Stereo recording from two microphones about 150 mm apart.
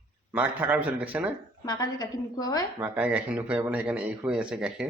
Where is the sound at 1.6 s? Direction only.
25° left (ahead or behind).